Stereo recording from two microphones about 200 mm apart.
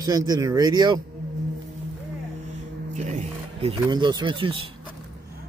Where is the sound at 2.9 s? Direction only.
35° right (ahead or behind).